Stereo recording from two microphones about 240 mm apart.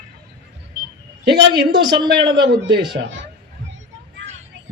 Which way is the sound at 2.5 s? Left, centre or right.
Right.